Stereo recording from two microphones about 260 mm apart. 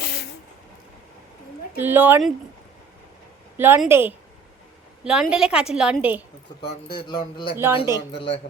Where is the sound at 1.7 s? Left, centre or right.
Centre.